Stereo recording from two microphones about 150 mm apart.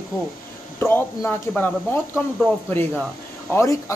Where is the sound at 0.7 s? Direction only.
15° left (ahead or behind).